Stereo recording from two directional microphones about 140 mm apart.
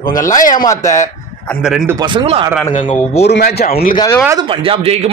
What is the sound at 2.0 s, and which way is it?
Speech, 35° right (ahead or behind).